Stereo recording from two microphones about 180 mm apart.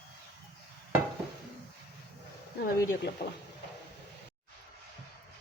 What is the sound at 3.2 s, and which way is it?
Speech, 60° left (ahead or behind).